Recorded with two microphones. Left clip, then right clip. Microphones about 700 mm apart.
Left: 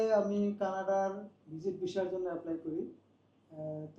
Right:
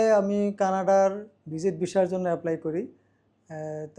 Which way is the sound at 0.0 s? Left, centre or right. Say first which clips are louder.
Right 8 dB; right.